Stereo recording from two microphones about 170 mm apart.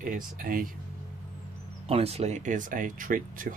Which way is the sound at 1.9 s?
35° right (ahead or behind).